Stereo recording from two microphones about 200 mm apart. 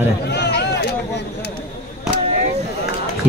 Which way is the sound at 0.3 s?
55° left (ahead or behind).